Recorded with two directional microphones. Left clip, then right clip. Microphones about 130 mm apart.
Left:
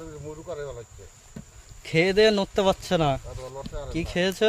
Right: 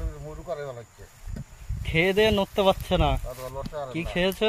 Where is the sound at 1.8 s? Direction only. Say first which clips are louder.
Left 2 dB; 50° left (ahead or behind).